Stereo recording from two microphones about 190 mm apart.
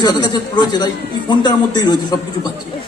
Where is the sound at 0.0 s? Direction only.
25° left (ahead or behind).